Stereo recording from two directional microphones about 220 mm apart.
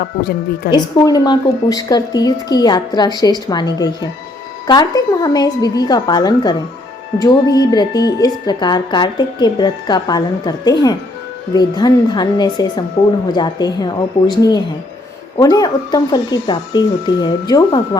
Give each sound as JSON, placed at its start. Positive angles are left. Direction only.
{"t": 0.7, "sound": "a woman's voice", "side_deg": 20}